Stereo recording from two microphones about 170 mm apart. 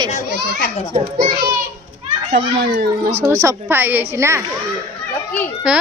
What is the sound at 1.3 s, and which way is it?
Speech, 65° right (ahead or behind).